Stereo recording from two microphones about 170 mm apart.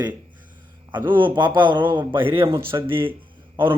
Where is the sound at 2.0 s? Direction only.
10° right (ahead or behind).